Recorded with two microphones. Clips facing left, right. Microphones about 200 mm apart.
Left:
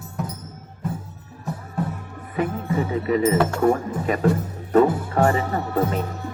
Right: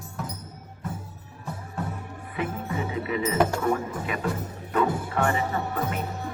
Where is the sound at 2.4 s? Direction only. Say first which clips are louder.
Left 6 dB; 45° left (ahead or behind).